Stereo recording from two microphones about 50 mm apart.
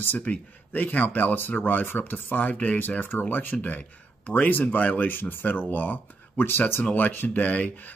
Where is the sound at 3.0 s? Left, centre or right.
Left.